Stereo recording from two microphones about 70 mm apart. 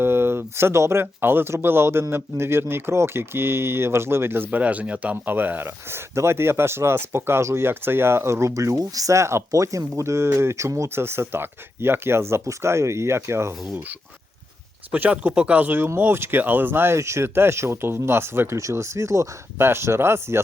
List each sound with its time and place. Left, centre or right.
0.0 s speech: right
4.6 s speech: centre; by 13.5 s right
14.9 s speech: right